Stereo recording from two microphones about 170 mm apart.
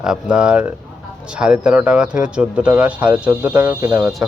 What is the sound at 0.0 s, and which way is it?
Speech, 5° right (ahead or behind).